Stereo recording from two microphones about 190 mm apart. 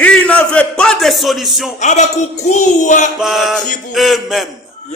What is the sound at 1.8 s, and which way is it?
Speech, 35° left (ahead or behind).